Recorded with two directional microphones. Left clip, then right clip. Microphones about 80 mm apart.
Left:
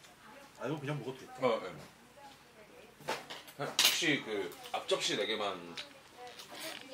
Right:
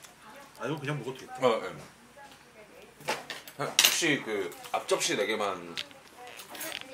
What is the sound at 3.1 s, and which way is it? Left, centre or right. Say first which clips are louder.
Drawer open or close: right 6 dB; right.